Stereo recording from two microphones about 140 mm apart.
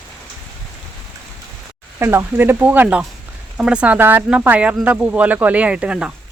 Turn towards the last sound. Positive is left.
turn(degrees=-10)  # may be behind; listen again after turning